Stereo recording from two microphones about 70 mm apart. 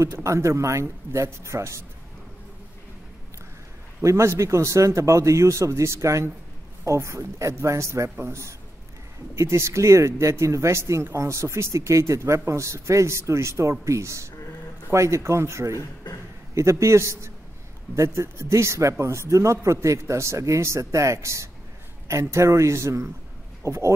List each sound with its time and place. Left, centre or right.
0.0 s speech: right
4.0 s speech: right
15.7 s a sound: left
16.5 s speech: right